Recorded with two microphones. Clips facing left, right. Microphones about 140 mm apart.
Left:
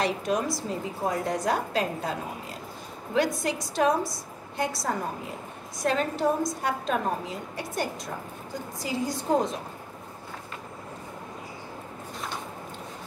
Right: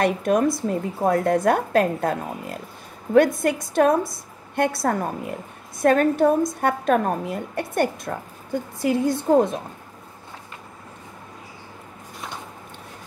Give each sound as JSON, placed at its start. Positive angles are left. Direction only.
{"t": 0.0, "sound": "a woman's voice", "side_deg": -55}